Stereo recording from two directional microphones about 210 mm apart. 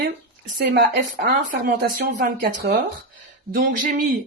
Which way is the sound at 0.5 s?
45° right (ahead or behind).